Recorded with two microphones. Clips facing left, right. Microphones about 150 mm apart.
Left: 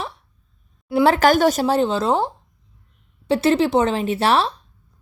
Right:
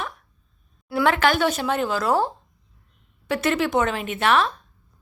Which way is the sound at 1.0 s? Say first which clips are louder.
Left 5 dB; 40° left (ahead or behind).